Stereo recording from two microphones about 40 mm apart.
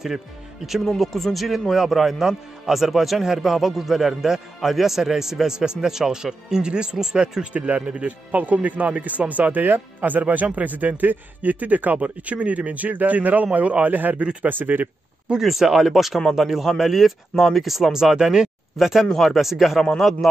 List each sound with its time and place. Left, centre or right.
0.8 s speech: centre
7.5 s a man's voice: right
15.4 s speech: centre
17.9 s speech: centre
18.8 s speech: centre